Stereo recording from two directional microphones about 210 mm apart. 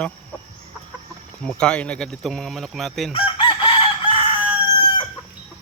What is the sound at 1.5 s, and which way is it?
Speech, 5° left (ahead or behind).